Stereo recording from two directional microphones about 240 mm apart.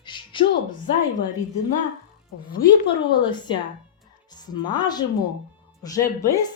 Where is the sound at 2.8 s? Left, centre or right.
Centre.